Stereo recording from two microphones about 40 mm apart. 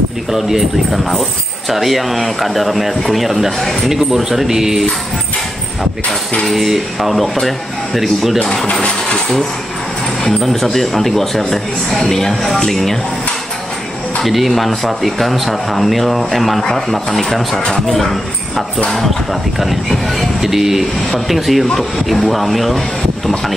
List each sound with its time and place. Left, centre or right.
0.3 s a man's voice: centre
6.4 s a man's voice: centre
10.4 s a man's voice: centre
14.2 s a man's voice: centre